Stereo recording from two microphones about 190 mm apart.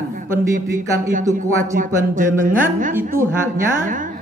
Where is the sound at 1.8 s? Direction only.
45° right (ahead or behind).